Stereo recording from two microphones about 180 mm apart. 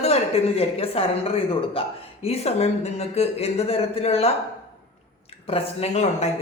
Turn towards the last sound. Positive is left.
turn(degrees=40)  # may be behind; listen again after turning